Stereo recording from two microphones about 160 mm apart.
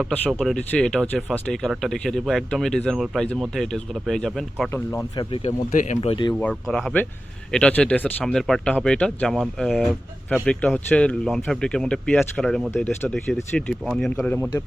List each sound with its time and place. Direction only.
0.1 s speech: centre (ahead or behind)
4.7 s speech: 15° left (ahead or behind)
5.1 s speech: 35° left (ahead or behind)
6.4 s speech: 5° left (ahead or behind)